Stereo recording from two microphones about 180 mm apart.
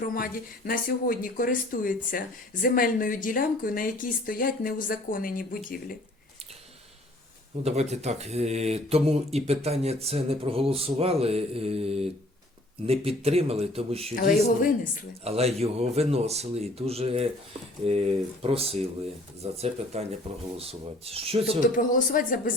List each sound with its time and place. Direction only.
0.1 s speech: 50° left (ahead or behind)
7.6 s speech: 35° right (ahead or behind)
15.2 s speech: 35° right (ahead or behind)
21.6 s speech: 50° left (ahead or behind)